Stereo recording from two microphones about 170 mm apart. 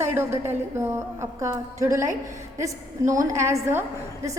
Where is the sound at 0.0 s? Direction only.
15° right (ahead or behind).